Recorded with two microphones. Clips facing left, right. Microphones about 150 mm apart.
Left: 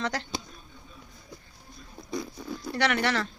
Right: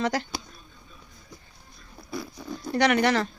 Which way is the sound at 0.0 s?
10° right (ahead or behind).